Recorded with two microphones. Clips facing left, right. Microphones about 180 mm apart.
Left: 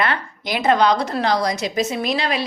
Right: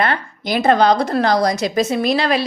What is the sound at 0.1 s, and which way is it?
A woman's voice, 45° right (ahead or behind).